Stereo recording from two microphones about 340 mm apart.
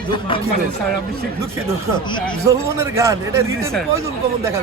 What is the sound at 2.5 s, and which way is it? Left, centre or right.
A man's voice, centre.